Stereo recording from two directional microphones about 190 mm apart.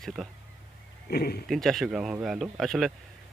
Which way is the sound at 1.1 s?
55° left (ahead or behind).